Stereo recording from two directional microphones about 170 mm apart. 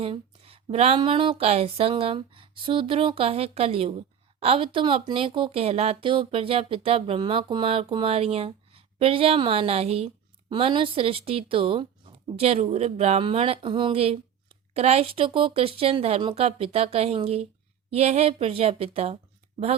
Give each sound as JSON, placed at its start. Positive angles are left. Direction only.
{"t": 0.0, "sound": "a woman's voice", "side_deg": -35}